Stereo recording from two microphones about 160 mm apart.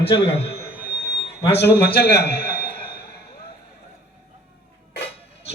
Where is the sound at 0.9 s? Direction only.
90° left.